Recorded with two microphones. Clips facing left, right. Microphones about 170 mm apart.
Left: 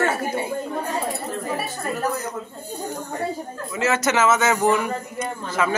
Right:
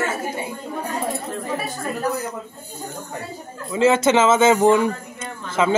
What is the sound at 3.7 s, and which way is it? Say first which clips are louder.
Speech: right 5 dB; 25° right (ahead or behind).